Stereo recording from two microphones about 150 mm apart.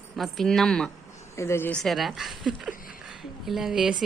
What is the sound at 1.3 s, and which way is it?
Speech, 20° left (ahead or behind).